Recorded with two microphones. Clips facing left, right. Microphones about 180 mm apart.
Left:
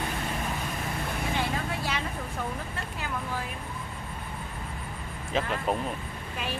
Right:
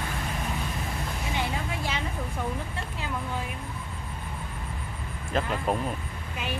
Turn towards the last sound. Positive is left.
turn(degrees=0)  # may be behind; listen again after turning